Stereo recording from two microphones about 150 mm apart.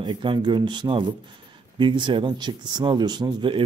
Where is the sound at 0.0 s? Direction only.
35° right (ahead or behind).